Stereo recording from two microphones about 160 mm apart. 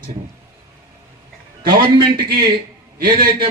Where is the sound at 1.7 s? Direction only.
30° right (ahead or behind).